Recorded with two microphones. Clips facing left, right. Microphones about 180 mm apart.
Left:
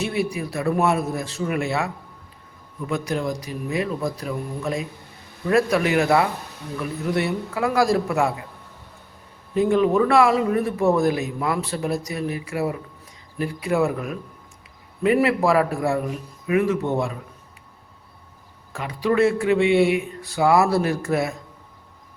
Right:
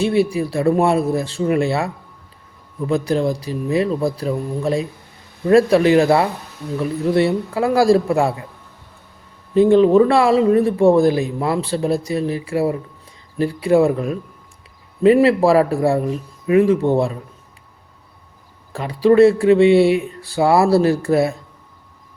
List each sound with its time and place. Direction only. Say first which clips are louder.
0.0 s speech: right 8 dB; 30° right (ahead or behind)
9.6 s speech: right 7 dB; 30° right (ahead or behind)
18.7 s speech: right 8 dB; 35° right (ahead or behind)